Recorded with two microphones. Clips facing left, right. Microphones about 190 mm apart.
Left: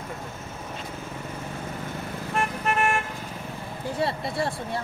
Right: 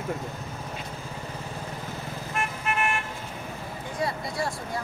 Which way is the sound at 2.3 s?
40° left (ahead or behind).